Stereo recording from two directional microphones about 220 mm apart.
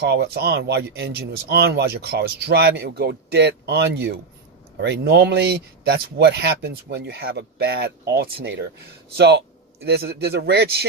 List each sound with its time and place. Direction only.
0.0 s speech: 50° right (ahead or behind)